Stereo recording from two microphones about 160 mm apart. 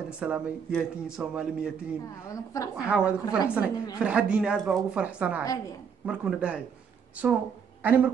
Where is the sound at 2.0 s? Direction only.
20° left (ahead or behind).